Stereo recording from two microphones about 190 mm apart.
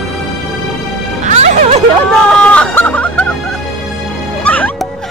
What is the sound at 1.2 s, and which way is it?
Music, 35° right (ahead or behind).